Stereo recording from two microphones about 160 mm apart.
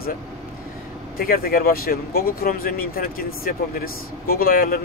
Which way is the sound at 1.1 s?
65° left (ahead or behind).